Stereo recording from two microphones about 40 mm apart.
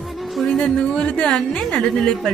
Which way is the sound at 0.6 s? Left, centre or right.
Left.